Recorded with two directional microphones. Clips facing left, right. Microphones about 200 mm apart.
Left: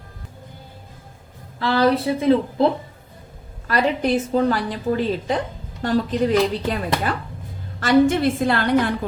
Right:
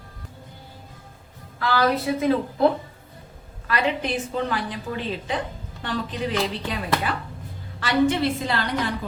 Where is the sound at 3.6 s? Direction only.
40° left (ahead or behind); by 8.9 s 55° left (ahead or behind).